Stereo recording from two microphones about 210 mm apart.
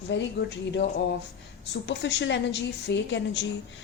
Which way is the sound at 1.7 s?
55° left (ahead or behind).